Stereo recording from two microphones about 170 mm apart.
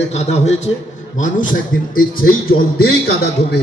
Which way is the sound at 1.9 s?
55° left (ahead or behind).